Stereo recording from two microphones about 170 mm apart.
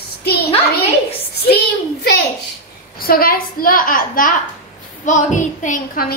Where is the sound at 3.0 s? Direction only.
60° left (ahead or behind).